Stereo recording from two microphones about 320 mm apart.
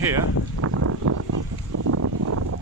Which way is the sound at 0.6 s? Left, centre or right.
Right.